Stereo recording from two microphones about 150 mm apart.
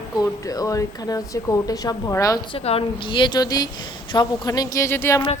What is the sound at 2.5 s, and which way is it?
A woman's voice, 40° left (ahead or behind).